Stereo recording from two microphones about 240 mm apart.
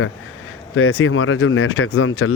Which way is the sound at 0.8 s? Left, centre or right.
Left.